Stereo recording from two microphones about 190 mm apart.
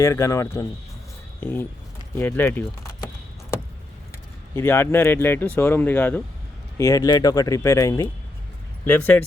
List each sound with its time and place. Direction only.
0.0 s speech: 15° left (ahead or behind)
4.5 s speech: 10° left (ahead or behind)